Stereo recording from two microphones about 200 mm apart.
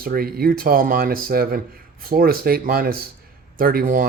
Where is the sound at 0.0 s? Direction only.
50° right (ahead or behind).